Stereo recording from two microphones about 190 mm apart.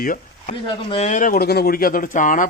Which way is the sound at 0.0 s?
45° left (ahead or behind).